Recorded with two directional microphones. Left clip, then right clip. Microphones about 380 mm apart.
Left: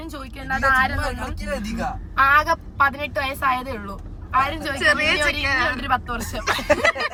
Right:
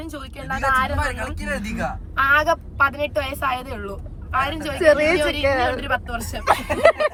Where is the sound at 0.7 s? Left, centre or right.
Centre.